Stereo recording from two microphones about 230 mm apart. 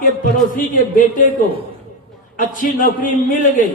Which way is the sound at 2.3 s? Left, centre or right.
Left.